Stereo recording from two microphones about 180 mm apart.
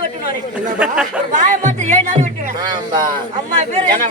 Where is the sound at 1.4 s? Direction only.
45° right (ahead or behind).